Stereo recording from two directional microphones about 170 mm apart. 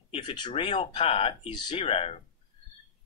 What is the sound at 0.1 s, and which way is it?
Speech, 30° left (ahead or behind).